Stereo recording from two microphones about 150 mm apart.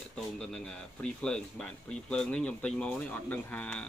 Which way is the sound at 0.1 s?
5° left (ahead or behind).